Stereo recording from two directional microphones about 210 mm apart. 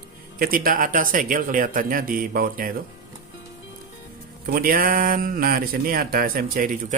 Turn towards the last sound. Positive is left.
turn(degrees=-40)  # may be behind; listen again after turning